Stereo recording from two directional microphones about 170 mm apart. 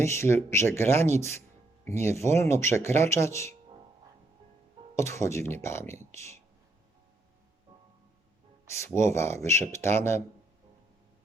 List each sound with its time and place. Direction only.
0.0 s speech: 15° left (ahead or behind)
4.9 s speech: 15° left (ahead or behind)
9.0 s speech: 15° left (ahead or behind)